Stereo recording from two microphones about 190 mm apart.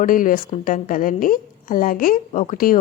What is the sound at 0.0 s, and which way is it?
Speech, 45° left (ahead or behind).